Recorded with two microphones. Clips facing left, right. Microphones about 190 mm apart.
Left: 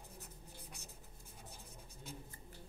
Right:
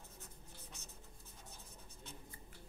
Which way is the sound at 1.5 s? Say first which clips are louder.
Left 2 dB; 10° left (ahead or behind).